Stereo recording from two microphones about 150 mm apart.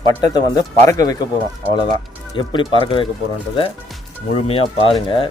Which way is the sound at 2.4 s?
30° left (ahead or behind).